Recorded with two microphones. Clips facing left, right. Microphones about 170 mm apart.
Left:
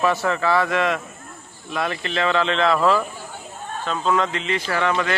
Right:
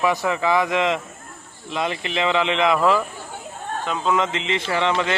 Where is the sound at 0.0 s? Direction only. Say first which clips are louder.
Even; 15° right (ahead or behind).